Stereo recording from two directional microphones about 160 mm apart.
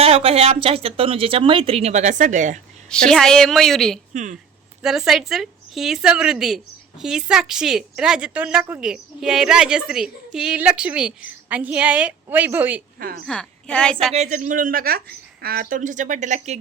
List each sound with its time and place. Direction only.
0.0 s a woman's voice: 35° right (ahead or behind)
2.9 s a woman's voice: 5° left (ahead or behind)
4.1 s a woman's voice: 50° right (ahead or behind)
4.8 s a woman's voice: 5° right (ahead or behind)
13.0 s speech: 70° right (ahead or behind)
13.2 s a woman's voice: 5° left (ahead or behind)
14.1 s a woman's voice: 45° right (ahead or behind)